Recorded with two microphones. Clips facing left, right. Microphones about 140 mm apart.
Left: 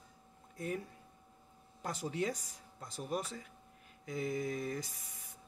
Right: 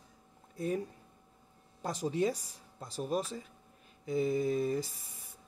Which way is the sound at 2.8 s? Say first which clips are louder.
Right 5 dB; 30° right (ahead or behind).